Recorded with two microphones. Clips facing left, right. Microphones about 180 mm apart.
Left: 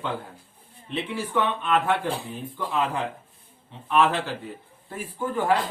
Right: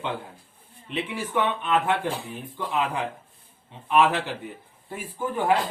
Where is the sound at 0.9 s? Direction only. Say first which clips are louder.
Even; 15° right (ahead or behind).